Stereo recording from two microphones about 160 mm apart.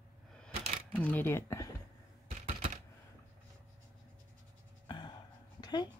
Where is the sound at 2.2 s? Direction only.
45° right (ahead or behind).